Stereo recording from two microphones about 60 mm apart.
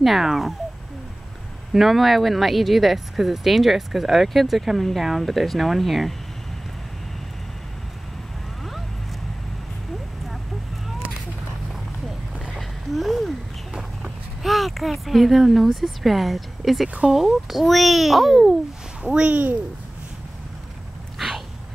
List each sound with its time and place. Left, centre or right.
0.0 s speech: centre
1.7 s speech: centre
12.5 s a sound: centre
13.7 s speech: centre
19.0 s speech: centre